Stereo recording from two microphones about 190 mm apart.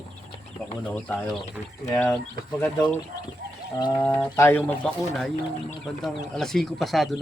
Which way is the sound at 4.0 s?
10° left (ahead or behind).